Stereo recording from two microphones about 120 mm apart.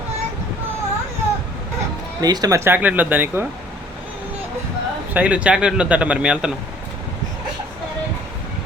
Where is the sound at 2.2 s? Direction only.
30° right (ahead or behind); by 3.4 s 15° right (ahead or behind).